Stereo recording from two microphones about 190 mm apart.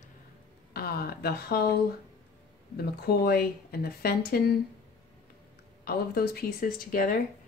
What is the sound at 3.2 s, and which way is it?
Speech, 55° left (ahead or behind).